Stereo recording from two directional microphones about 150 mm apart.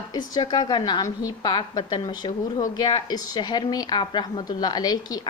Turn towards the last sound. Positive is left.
turn(degrees=25)  # may be behind; listen again after turning